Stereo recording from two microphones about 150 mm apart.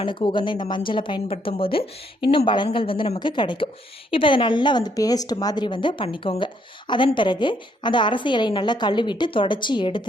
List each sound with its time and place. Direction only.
0.0 s speech: 35° left (ahead or behind)